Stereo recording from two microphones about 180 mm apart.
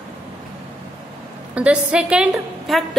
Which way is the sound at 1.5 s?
5° right (ahead or behind).